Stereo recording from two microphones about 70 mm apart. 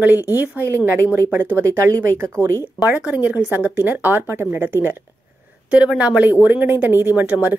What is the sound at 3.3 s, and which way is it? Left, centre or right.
Speech, right.